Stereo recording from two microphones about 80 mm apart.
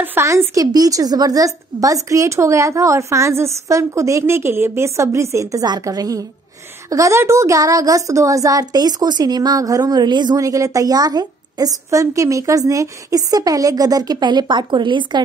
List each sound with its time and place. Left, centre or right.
0.0 s a woman's voice: right
0.6 s a woman's voice: right
10.3 s a woman's voice: right